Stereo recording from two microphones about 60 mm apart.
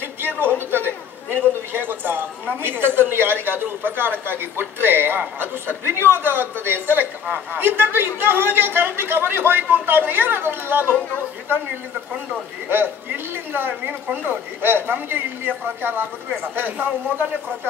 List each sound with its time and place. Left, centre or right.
0.2 s a sound: right
0.7 s a man's voice: right
12.6 s speech: right